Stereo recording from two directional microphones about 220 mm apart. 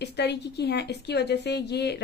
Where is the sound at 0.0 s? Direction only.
50° left (ahead or behind).